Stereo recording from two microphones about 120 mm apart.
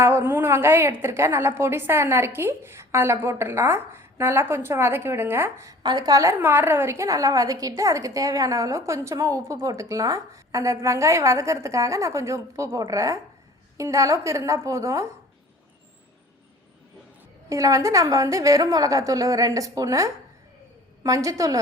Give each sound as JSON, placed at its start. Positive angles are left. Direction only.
{"t": 0.0, "sound": "a woman's voice", "side_deg": -20}
{"t": 5.8, "sound": "a woman's voice", "side_deg": -35}
{"t": 6.4, "sound": "a woman's voice", "side_deg": -15}
{"t": 17.5, "sound": "a woman's voice", "side_deg": -25}